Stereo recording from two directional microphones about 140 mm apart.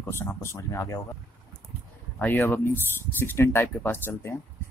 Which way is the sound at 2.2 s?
15° left (ahead or behind).